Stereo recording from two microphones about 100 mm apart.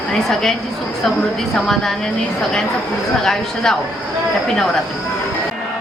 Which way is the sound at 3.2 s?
5° left (ahead or behind).